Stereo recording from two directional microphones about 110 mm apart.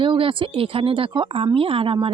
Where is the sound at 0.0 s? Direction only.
55° right (ahead or behind).